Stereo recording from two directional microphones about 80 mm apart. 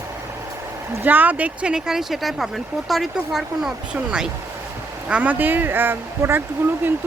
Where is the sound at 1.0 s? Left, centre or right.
Right; by 3.7 s centre.